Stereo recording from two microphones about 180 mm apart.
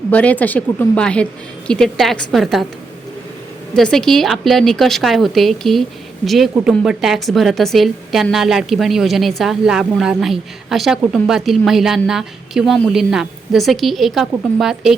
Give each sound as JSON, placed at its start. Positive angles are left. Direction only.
{"t": 0.1, "sound": "a woman's voice", "side_deg": 10}
{"t": 3.8, "sound": "a woman's voice", "side_deg": 5}